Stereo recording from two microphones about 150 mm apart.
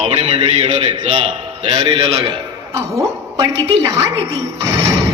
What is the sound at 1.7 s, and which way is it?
Speech, 40° right (ahead or behind).